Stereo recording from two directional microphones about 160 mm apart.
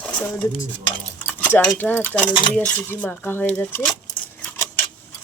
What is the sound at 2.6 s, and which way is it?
Speech, 10° left (ahead or behind).